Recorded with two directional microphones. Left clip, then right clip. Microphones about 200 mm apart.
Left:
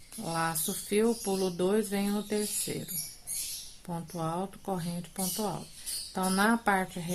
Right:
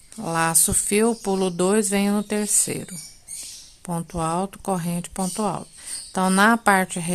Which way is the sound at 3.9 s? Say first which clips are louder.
Right 10 dB; 45° right (ahead or behind).